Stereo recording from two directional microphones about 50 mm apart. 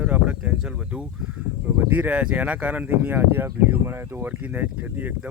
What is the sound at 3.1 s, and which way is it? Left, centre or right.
Speech, right.